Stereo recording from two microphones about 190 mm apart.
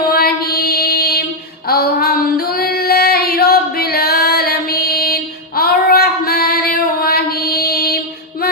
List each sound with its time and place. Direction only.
0.1 s mantra: 55° left (ahead or behind)
1.6 s female singing: 55° left (ahead or behind)